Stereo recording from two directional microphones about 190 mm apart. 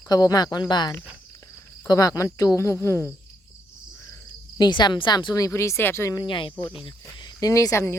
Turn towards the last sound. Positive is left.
turn(degrees=15)  # may be behind; listen again after turning